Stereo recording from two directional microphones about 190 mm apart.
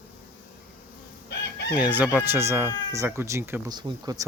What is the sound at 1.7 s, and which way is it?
Speech, 10° right (ahead or behind).